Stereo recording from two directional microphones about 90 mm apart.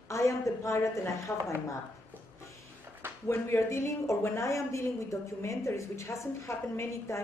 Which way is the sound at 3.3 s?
30° left (ahead or behind).